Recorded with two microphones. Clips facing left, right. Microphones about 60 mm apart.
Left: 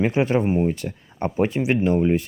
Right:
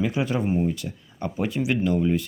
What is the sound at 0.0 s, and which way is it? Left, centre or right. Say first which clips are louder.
Speech: left 5 dB; left.